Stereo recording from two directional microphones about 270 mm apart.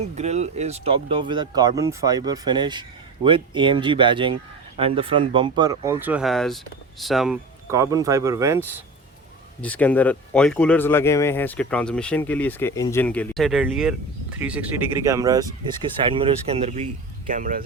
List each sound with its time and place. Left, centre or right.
0.2 s speech: right
9.6 s speech: centre; by 17.6 s right